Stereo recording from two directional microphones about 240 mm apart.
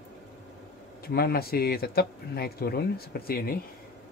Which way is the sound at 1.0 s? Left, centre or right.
Left.